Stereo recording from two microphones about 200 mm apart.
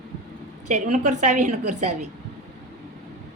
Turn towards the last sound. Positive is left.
turn(degrees=-35)  # may be behind; listen again after turning